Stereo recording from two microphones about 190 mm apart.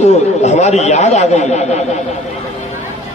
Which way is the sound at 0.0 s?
35° left (ahead or behind).